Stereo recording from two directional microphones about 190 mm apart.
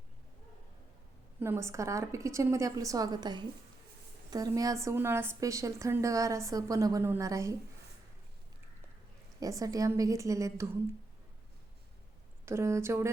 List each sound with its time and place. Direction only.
1.4 s a woman's voice: 15° right (ahead or behind)
9.4 s a woman's voice: 15° right (ahead or behind)
12.5 s a woman's voice: 15° right (ahead or behind)